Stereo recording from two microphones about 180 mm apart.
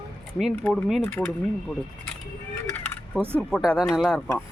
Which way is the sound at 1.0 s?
10° left (ahead or behind).